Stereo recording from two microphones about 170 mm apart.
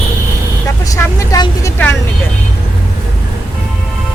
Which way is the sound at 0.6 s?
20° left (ahead or behind).